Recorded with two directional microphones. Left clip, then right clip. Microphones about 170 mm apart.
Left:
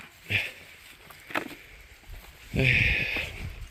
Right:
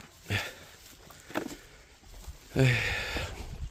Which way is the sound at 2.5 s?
25° right (ahead or behind).